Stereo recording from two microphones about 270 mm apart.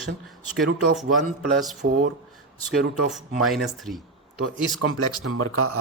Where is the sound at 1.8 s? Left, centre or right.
Right.